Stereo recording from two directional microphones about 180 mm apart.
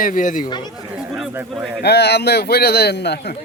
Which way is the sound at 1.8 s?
65° left (ahead or behind).